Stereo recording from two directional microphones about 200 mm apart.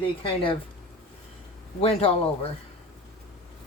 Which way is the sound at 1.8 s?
30° left (ahead or behind).